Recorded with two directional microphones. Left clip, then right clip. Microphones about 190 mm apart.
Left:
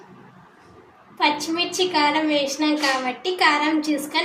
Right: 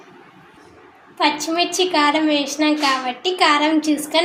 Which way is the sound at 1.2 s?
35° right (ahead or behind).